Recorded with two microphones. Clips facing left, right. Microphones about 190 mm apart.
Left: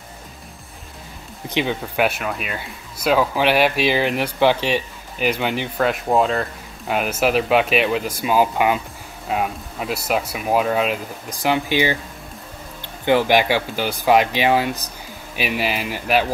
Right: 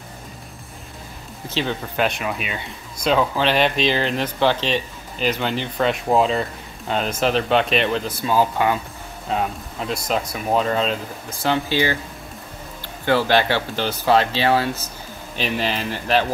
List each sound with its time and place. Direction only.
1.5 s speech: 15° left (ahead or behind)
5.8 s speech: centre (ahead or behind)
13.0 s speech: 15° left (ahead or behind)